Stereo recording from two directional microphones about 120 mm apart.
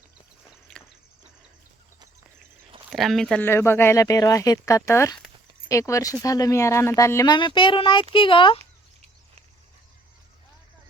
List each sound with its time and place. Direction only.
0.7 s a sound: 5° left (ahead or behind)
2.9 s speech: centre (ahead or behind)
3.4 s speech: 20° left (ahead or behind)
7.3 s speech: 40° left (ahead or behind)